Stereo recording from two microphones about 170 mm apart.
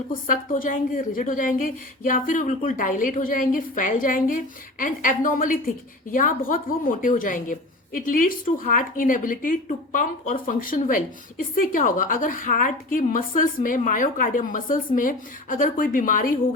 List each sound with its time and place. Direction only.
0.1 s a woman's voice: 55° left (ahead or behind)